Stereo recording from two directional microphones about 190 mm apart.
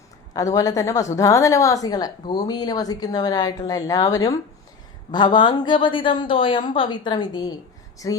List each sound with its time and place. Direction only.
0.3 s a woman's voice: 20° left (ahead or behind)